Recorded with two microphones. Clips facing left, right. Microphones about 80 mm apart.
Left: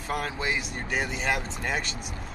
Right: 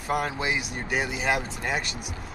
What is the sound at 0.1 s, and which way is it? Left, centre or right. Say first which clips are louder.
Speech: right 3 dB; centre.